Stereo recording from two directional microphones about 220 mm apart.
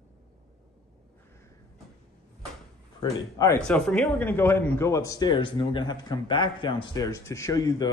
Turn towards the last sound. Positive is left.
turn(degrees=15)  # may be behind; listen again after turning